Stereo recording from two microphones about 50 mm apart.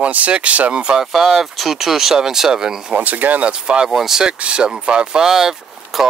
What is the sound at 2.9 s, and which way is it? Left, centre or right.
Speech, right.